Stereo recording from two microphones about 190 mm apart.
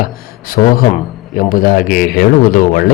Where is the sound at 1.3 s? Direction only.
45° left (ahead or behind).